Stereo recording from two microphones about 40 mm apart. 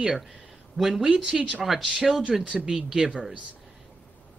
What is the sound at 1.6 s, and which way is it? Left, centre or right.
Speech, centre.